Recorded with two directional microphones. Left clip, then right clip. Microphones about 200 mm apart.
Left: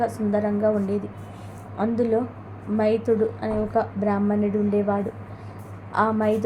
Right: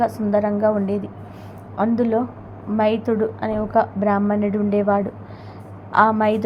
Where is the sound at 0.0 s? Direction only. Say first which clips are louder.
Right 4 dB; 15° right (ahead or behind).